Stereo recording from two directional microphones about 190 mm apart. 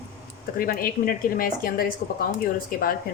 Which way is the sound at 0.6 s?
50° left (ahead or behind).